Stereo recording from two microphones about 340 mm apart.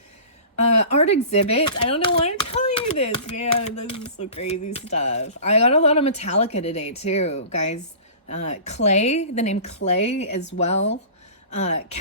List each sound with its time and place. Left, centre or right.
0.8 s speech: centre
3.8 s a sound: centre
4.7 s speech: centre